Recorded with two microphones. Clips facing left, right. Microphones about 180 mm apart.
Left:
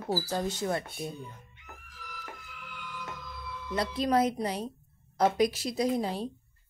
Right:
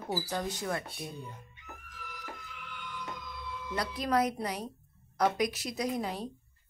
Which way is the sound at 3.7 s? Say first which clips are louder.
Left 3 dB; 25° left (ahead or behind).